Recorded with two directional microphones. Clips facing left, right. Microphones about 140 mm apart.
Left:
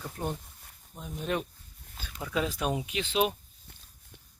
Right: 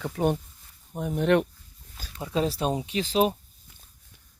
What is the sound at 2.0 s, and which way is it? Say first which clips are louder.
Speech: right 4 dB; 30° right (ahead or behind).